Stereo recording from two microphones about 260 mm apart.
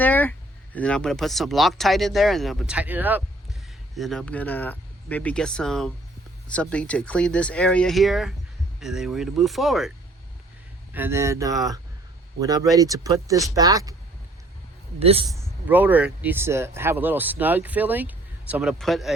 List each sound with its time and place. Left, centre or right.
0.0 s speech: centre
10.9 s speech: centre
14.9 s a man's voice: right
15.3 s speech: centre